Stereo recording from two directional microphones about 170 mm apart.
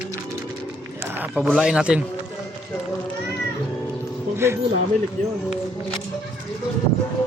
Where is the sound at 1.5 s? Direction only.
Centre (ahead or behind).